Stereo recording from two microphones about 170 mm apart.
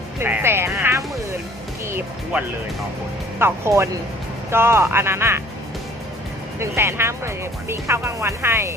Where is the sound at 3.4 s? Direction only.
15° right (ahead or behind).